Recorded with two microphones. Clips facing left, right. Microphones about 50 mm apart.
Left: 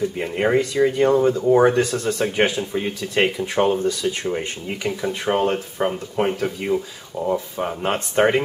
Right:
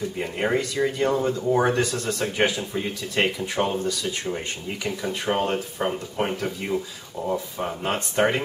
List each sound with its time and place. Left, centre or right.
0.2 s speech: centre
4.8 s speech: centre